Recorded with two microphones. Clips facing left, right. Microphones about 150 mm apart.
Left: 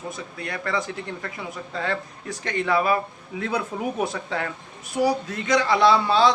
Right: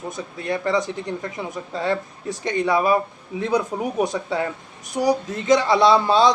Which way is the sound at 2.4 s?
15° right (ahead or behind).